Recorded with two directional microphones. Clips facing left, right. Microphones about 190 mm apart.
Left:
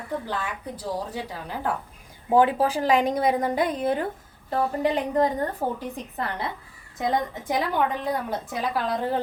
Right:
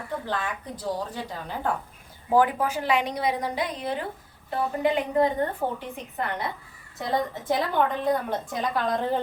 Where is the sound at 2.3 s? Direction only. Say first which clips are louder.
Left 2 dB; 25° left (ahead or behind); by 4.0 s 50° left (ahead or behind).